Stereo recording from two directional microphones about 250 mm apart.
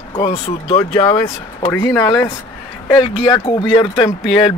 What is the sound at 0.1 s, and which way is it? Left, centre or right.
Speech, left.